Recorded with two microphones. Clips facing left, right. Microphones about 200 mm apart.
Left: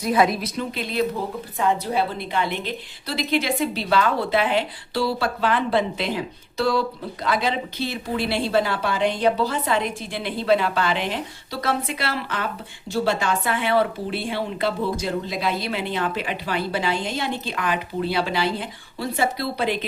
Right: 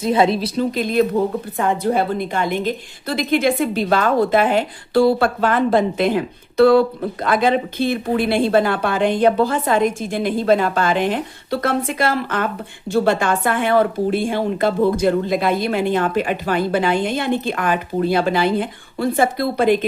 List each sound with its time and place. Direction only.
0.0 s a woman's voice: 25° right (ahead or behind); by 19.8 s 50° right (ahead or behind)